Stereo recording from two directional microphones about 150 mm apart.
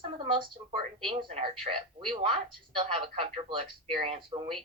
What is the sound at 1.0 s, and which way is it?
Speech, 35° right (ahead or behind).